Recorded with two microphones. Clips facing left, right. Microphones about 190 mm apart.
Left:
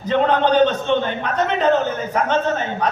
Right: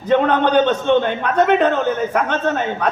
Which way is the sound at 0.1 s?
55° right (ahead or behind).